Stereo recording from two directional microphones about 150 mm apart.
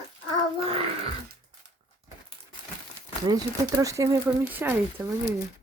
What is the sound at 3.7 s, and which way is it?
Speech, 20° right (ahead or behind).